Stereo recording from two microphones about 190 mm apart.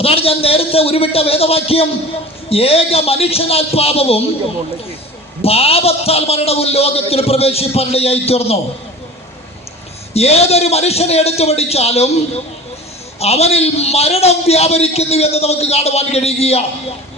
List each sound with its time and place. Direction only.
0.0 s a man's voice: 30° left (ahead or behind)
5.4 s a man's voice: 30° left (ahead or behind)
10.2 s a man's voice: 35° left (ahead or behind)
13.1 s a man's voice: 35° left (ahead or behind)